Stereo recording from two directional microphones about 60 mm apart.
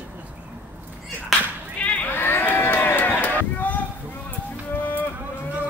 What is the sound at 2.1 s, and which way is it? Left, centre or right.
Run, left.